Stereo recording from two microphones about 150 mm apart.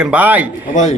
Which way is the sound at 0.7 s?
55° left (ahead or behind).